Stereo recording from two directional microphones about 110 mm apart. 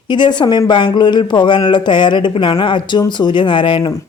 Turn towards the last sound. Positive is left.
turn(degrees=45)  # may be behind; listen again after turning